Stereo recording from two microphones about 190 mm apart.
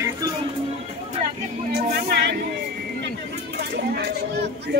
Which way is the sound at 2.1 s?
60° right (ahead or behind).